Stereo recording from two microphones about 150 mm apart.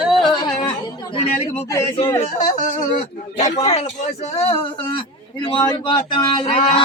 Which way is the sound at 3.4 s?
45° left (ahead or behind).